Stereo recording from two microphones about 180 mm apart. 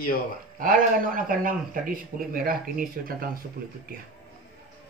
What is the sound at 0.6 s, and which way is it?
Speech, 50° right (ahead or behind).